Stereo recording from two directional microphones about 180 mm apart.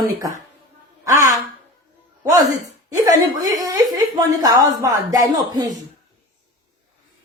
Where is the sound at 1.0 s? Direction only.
20° right (ahead or behind).